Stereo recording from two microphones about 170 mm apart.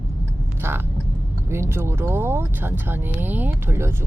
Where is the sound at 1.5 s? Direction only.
15° right (ahead or behind).